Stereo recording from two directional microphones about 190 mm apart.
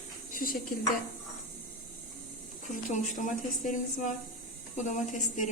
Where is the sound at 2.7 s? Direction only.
40° left (ahead or behind).